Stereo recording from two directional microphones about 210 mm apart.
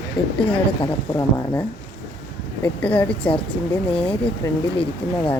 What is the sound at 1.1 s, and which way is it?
Speech, 15° left (ahead or behind).